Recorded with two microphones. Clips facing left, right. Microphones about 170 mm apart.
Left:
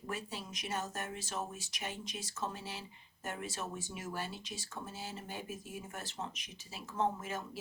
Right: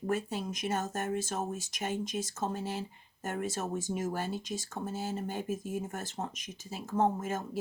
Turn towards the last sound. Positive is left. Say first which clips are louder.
# right 6 dB
turn(degrees=-45)  # may be behind; listen again after turning